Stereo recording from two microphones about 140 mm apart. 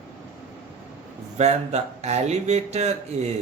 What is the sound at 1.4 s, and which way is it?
Speech, 55° right (ahead or behind).